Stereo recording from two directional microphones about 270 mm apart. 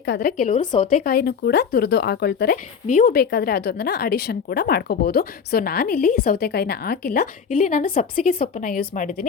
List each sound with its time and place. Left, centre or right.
0.0 s a woman's voice: left